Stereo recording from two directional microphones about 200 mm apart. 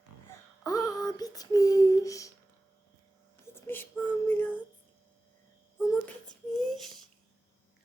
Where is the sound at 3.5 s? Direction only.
10° left (ahead or behind).